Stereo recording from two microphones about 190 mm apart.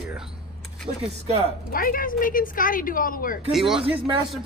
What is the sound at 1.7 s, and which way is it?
A woman's voice, 45° left (ahead or behind).